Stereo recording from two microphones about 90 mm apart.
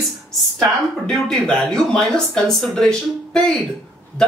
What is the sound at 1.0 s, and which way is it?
Speech, 5° left (ahead or behind).